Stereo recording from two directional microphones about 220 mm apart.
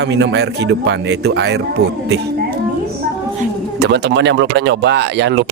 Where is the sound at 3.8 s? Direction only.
50° right (ahead or behind).